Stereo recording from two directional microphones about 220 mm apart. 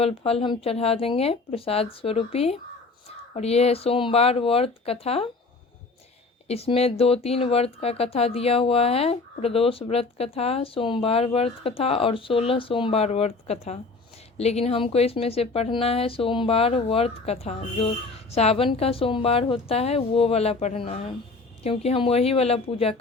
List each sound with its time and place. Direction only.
0.0 s speech: 25° left (ahead or behind)
6.5 s speech: 25° left (ahead or behind)